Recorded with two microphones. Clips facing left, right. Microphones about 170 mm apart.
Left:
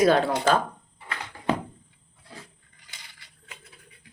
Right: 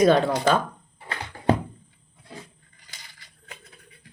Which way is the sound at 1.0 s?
35° right (ahead or behind).